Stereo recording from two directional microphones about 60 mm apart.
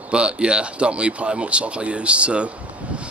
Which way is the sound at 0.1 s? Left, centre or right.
Centre.